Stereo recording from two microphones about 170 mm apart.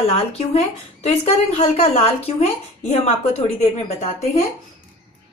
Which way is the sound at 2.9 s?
35° left (ahead or behind).